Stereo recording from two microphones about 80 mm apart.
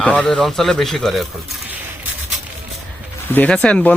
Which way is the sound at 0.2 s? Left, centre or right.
Centre.